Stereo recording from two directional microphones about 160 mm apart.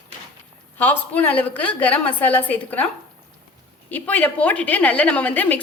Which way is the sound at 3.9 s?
10° left (ahead or behind).